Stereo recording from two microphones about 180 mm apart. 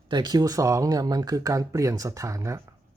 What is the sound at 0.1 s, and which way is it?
Speech, 25° right (ahead or behind).